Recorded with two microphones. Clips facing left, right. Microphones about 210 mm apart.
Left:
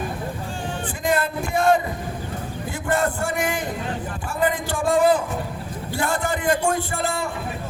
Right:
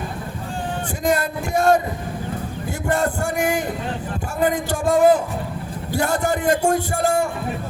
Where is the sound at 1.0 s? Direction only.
45° right (ahead or behind).